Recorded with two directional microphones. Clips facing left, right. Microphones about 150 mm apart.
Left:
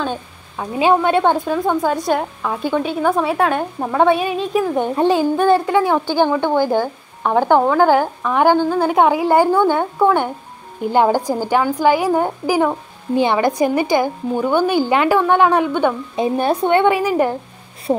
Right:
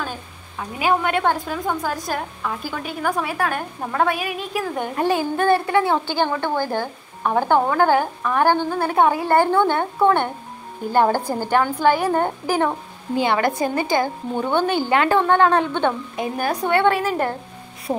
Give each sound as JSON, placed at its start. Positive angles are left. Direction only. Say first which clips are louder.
{"t": 0.0, "sound": "a woman's voice", "louder": "left 7 dB", "side_deg": 25}
{"t": 16.2, "sound": "a woman's voice", "louder": "left 6 dB", "side_deg": 25}
{"t": 17.9, "sound": "speech", "louder": "left 6 dB", "side_deg": 25}